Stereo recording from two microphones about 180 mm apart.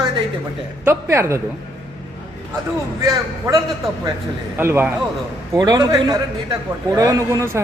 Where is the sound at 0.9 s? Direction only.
15° right (ahead or behind).